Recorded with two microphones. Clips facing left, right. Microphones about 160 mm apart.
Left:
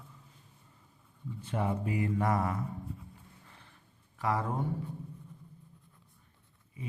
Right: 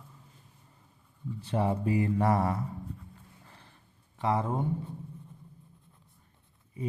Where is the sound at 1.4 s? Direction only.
30° right (ahead or behind).